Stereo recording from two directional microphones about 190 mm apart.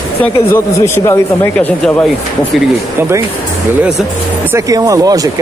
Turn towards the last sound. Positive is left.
turn(degrees=-20)  # may be behind; listen again after turning